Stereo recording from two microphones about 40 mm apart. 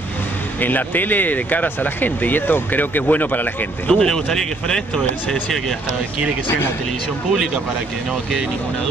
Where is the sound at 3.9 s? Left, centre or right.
Centre.